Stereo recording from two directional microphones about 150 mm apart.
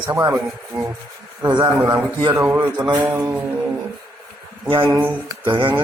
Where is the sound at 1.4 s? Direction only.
30° right (ahead or behind).